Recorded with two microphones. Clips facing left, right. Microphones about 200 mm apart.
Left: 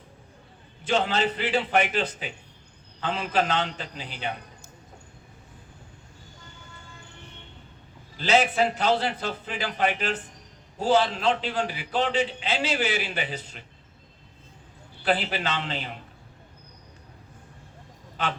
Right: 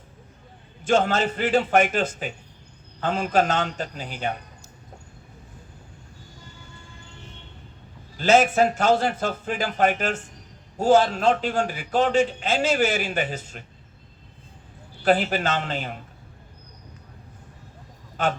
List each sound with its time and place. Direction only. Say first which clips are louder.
0.9 s a man's voice: right 4 dB; 45° right (ahead or behind)
8.2 s a man's voice: right 4 dB; 45° right (ahead or behind)
15.0 s a man's voice: right 5 dB; 45° right (ahead or behind)
18.2 s a man's voice: right 5 dB; 45° right (ahead or behind)